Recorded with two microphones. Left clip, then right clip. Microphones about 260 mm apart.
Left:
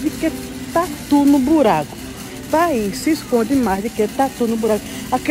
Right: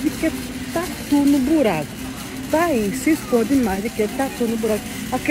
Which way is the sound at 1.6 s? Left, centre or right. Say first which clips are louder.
Left 4 dB; centre.